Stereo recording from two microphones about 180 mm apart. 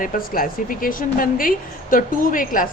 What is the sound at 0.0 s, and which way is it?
A woman's voice, 50° left (ahead or behind).